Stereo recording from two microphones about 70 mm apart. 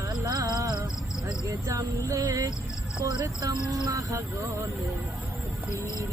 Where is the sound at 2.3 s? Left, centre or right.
Right.